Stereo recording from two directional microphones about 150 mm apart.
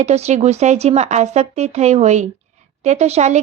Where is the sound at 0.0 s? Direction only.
45° right (ahead or behind).